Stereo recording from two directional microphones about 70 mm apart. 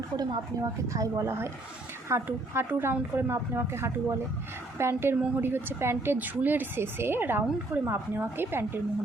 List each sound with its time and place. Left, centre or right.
0.2 s a woman's voice: right